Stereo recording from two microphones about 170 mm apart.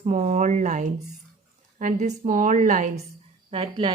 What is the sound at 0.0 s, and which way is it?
A woman's voice, 45° right (ahead or behind).